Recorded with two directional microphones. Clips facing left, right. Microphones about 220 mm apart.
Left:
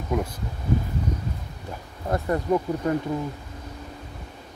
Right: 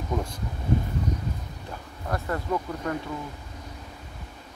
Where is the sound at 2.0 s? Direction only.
20° left (ahead or behind).